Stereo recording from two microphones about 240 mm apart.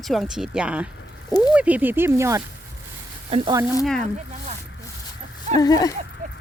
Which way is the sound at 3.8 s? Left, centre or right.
Centre.